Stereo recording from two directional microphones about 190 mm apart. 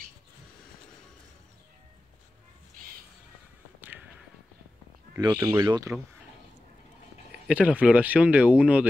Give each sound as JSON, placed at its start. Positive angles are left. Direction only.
{"t": 5.1, "sound": "speech", "side_deg": -15}
{"t": 7.4, "sound": "speech", "side_deg": -5}